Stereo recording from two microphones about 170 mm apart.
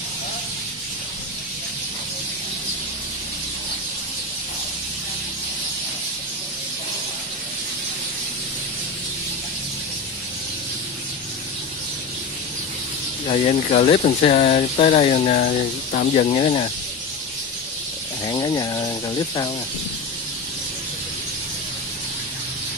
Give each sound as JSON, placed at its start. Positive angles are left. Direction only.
{"t": 13.3, "sound": "speech", "side_deg": 40}
{"t": 18.2, "sound": "speech", "side_deg": 25}